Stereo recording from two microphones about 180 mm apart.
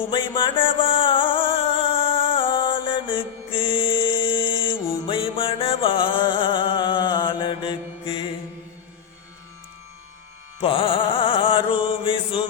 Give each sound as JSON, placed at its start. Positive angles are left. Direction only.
{"t": 0.1, "sound": "music", "side_deg": 25}
{"t": 10.6, "sound": "music", "side_deg": 30}